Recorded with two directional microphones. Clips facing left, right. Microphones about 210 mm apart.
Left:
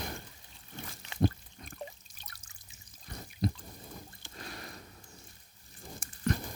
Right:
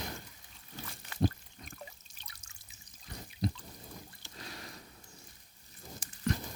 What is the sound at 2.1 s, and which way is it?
Trickle, 45° left (ahead or behind).